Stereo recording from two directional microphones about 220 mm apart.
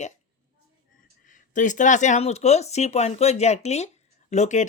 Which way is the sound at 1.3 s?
35° left (ahead or behind).